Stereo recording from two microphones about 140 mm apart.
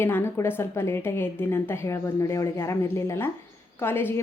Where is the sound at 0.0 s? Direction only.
15° left (ahead or behind).